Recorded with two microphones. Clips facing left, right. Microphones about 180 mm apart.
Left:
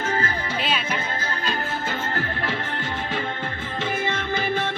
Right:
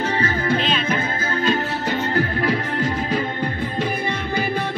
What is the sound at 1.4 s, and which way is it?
Music, 40° right (ahead or behind).